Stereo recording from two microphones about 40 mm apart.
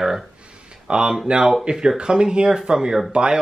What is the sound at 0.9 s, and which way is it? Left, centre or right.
Speech, right.